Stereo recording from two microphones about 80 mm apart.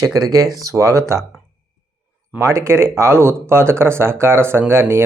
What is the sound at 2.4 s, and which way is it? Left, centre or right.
Speech, right.